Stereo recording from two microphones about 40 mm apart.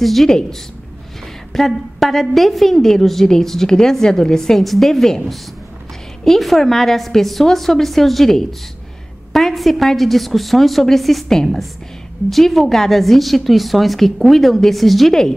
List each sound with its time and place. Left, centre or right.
0.0 s a woman's voice: centre
0.3 s a woman's voice: centre
1.5 s a woman's voice: centre